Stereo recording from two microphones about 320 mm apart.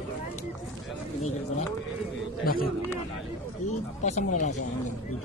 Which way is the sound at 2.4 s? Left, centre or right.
Left.